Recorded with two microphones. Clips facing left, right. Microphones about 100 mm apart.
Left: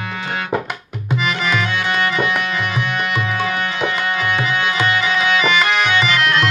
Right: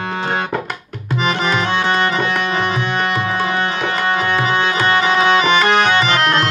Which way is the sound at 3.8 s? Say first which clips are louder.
Even; 35° right (ahead or behind).